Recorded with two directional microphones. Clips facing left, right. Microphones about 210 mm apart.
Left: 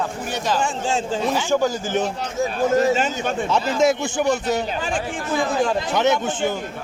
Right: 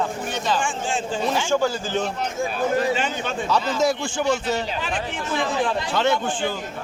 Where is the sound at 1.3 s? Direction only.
15° left (ahead or behind).